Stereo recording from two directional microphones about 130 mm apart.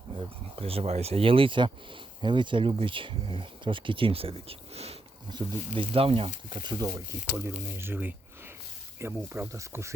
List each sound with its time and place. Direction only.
0.6 s speech: 50° right (ahead or behind); by 6.8 s 35° right (ahead or behind)
7.3 s speech: 15° right (ahead or behind)